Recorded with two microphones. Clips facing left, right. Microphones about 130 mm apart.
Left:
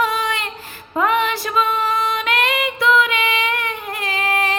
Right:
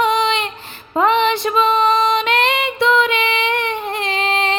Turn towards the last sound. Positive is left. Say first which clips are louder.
# right 2 dB
turn(degrees=-25)  # may be behind; listen again after turning